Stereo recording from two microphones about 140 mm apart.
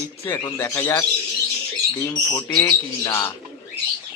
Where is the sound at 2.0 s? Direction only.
20° left (ahead or behind).